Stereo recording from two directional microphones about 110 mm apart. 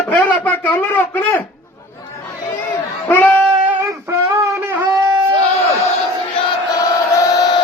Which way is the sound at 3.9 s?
25° right (ahead or behind).